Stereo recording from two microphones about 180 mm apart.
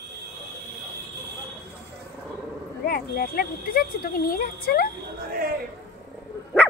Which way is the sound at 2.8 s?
55° left (ahead or behind).